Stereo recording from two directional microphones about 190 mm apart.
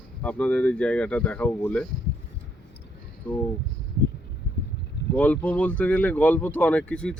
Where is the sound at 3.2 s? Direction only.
5° left (ahead or behind).